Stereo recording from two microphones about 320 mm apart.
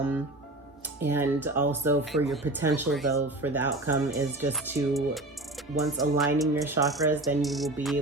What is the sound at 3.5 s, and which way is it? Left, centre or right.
Speech, right.